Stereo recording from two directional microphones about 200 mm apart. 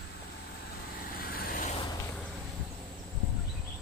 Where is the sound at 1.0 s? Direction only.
45° left (ahead or behind).